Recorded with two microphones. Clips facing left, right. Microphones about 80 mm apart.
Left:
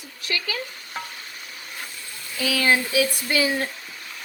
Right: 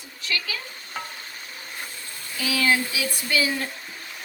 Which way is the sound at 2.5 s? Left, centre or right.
Left.